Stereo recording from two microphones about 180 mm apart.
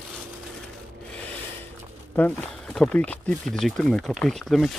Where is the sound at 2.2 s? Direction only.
10° left (ahead or behind).